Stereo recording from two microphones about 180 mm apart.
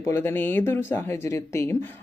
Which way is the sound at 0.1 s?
10° left (ahead or behind).